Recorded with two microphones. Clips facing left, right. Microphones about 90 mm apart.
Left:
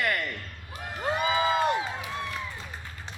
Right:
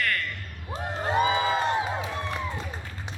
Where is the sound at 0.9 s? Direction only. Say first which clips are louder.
Right 4 dB; 30° right (ahead or behind).